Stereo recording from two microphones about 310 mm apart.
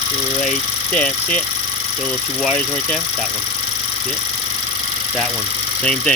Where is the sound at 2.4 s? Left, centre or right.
Centre.